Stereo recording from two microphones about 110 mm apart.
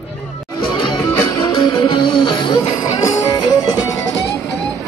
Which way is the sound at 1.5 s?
50° left (ahead or behind).